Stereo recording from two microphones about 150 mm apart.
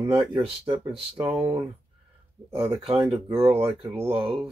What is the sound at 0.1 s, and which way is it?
Speech, 35° right (ahead or behind).